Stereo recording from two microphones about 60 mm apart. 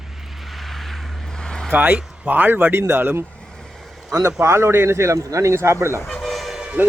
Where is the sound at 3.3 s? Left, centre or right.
Centre.